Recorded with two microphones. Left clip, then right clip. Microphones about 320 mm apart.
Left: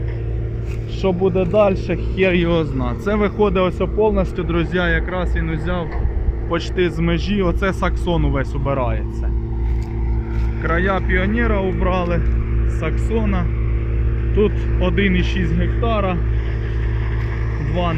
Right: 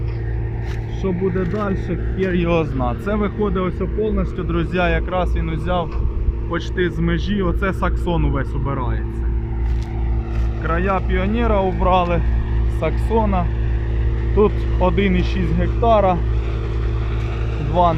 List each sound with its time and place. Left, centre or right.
1.0 s speech: centre
2.4 s speech: centre
10.6 s speech: centre